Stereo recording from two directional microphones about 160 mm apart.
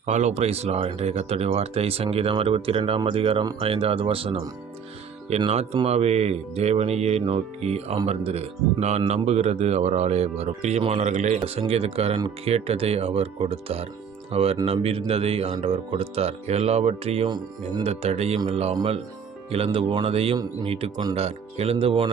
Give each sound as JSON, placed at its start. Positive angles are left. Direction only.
{"t": 0.0, "sound": "speech", "side_deg": -45}
{"t": 5.5, "sound": "speech", "side_deg": -40}
{"t": 17.2, "sound": "speech", "side_deg": -25}
{"t": 17.8, "sound": "speech", "side_deg": -40}